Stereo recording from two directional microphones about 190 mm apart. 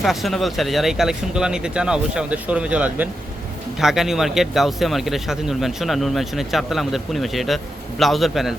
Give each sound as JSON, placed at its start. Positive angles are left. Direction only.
{"t": 0.0, "sound": "speech", "side_deg": 0}